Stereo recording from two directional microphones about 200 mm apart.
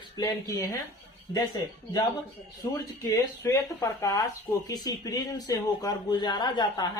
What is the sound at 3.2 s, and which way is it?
A woman's voice, 15° left (ahead or behind).